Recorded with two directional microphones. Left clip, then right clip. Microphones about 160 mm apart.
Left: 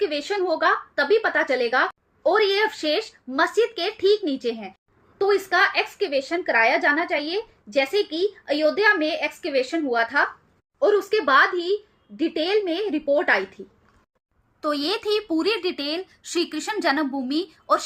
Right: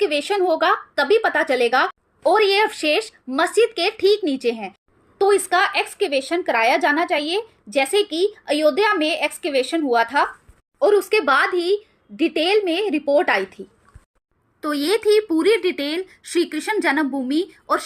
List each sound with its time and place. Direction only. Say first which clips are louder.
0.0 s a woman's voice: right 5 dB; 40° right (ahead or behind)
14.6 s speech: right 4 dB; 15° right (ahead or behind)